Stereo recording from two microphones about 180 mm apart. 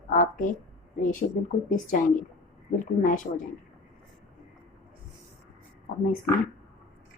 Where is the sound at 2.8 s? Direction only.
45° left (ahead or behind).